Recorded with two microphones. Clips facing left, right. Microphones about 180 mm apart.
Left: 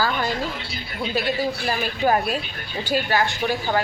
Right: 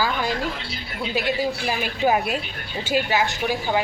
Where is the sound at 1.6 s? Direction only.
5° right (ahead or behind).